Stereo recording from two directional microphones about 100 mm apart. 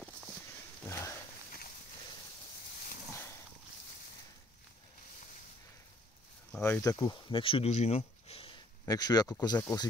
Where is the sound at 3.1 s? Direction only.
25° left (ahead or behind).